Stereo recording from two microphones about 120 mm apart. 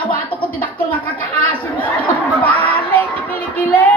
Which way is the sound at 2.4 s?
15° left (ahead or behind).